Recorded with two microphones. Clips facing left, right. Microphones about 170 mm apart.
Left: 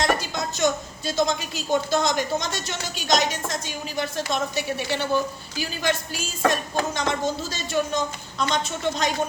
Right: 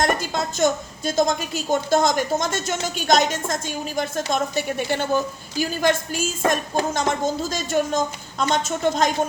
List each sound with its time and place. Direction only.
0.0 s a woman's voice: 50° right (ahead or behind)